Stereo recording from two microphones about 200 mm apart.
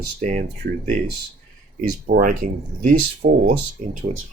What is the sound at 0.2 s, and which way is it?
Speech, 40° right (ahead or behind).